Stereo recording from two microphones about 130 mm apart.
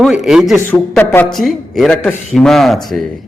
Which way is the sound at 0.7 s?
15° left (ahead or behind).